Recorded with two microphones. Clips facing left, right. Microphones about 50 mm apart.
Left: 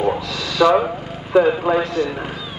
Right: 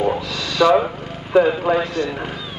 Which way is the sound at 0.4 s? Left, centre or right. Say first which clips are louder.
Even; centre.